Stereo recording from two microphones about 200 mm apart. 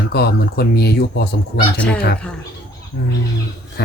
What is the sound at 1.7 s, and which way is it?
Speech, 5° left (ahead or behind).